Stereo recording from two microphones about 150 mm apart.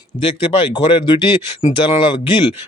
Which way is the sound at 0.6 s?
35° left (ahead or behind).